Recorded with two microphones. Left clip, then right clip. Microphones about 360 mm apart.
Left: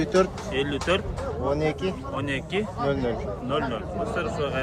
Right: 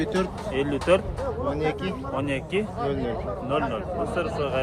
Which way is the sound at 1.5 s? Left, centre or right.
Centre.